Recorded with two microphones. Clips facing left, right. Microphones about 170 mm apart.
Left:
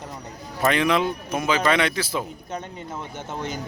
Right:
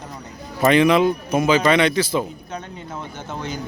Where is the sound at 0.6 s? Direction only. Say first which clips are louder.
Right 6 dB; 5° right (ahead or behind).